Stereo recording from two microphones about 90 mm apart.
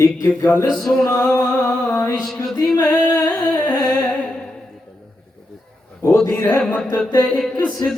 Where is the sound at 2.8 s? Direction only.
50° left (ahead or behind).